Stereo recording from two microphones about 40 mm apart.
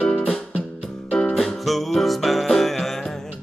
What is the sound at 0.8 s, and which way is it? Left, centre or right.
Music, left.